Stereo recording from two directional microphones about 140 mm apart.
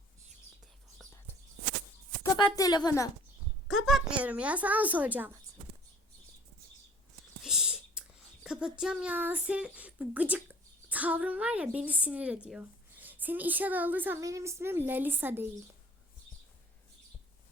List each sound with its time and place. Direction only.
2.2 s a woman's voice: 25° left (ahead or behind)
3.7 s speech: centre (ahead or behind)
7.4 s whispering: 5° right (ahead or behind)
8.4 s a woman's voice: 5° right (ahead or behind)